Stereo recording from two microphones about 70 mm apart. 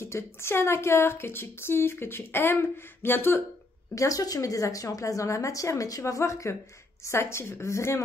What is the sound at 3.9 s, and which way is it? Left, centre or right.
A woman's voice, left.